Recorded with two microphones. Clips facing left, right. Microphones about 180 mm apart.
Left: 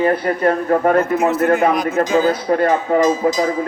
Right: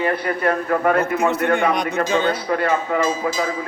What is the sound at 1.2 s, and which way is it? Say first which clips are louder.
A man's voice: left 3 dB; centre (ahead or behind).